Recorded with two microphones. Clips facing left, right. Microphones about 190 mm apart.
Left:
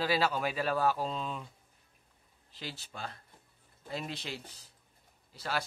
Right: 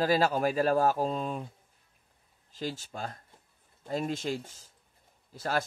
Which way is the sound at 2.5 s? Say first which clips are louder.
Right 8 dB; 45° right (ahead or behind).